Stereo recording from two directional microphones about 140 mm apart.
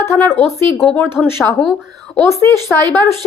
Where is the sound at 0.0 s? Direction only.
15° left (ahead or behind).